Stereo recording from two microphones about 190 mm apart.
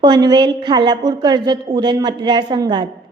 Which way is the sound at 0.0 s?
20° right (ahead or behind).